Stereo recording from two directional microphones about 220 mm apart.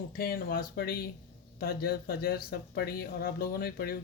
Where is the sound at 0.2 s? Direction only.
45° left (ahead or behind).